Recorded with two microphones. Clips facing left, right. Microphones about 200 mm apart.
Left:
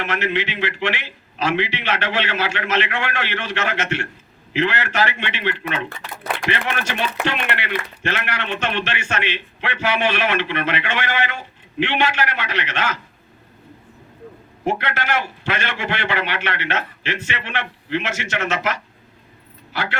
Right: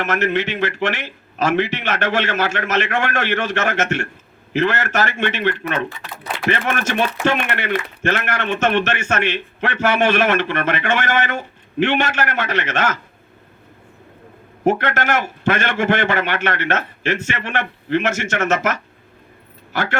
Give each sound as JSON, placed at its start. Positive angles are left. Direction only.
{"t": 0.0, "sound": "a man's voice", "side_deg": -45}
{"t": 14.6, "sound": "a man's voice", "side_deg": -45}